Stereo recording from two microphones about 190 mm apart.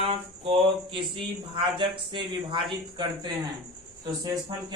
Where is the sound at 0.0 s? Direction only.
25° right (ahead or behind).